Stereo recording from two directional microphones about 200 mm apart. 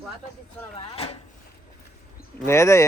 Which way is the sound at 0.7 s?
30° left (ahead or behind).